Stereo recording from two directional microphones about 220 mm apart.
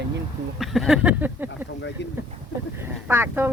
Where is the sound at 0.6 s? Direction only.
Centre (ahead or behind).